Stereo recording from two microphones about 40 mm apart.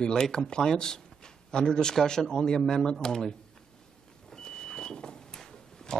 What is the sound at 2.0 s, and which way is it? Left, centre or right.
Speech, centre.